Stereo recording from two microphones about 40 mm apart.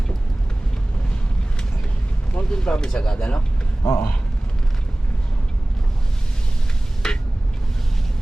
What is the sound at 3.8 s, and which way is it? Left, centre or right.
Speech, left.